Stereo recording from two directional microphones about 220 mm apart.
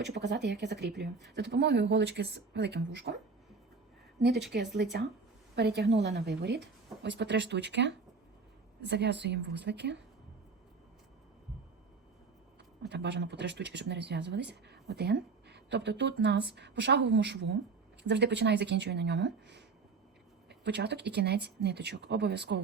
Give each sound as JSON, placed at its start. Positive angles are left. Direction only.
{"t": 0.0, "sound": "speech", "side_deg": -50}
{"t": 4.2, "sound": "speech", "side_deg": -50}
{"t": 12.9, "sound": "speech", "side_deg": -50}